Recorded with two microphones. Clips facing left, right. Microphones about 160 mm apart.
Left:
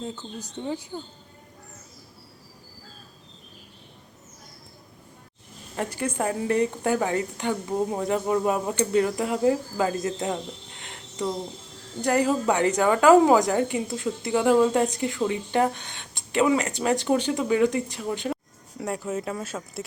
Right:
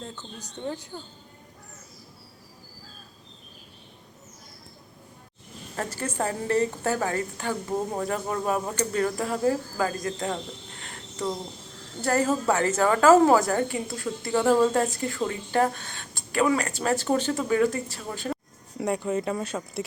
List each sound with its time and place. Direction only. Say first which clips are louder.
5.7 s a woman's voice: left 2 dB; 15° left (ahead or behind)
10.8 s a sound: left 3 dB; 20° left (ahead or behind)
12.0 s a woman's voice: left 1 dB; 15° left (ahead or behind)
18.8 s speech: right 3 dB; centre (ahead or behind)